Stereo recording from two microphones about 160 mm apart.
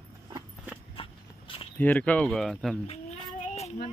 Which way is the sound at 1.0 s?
35° left (ahead or behind).